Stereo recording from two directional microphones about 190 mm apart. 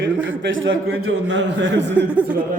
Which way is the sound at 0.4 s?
90° right.